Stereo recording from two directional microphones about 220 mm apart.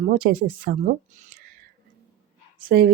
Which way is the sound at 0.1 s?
40° right (ahead or behind).